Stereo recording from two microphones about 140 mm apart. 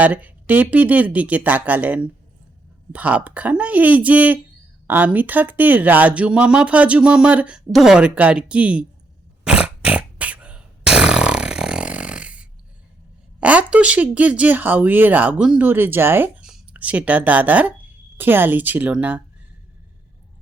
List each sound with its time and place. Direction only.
0.0 s speech: 10° right (ahead or behind)
9.4 s fart: 5° right (ahead or behind)
13.4 s speech: 10° right (ahead or behind)